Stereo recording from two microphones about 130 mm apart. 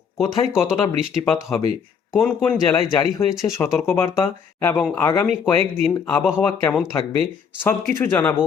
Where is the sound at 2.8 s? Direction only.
30° left (ahead or behind).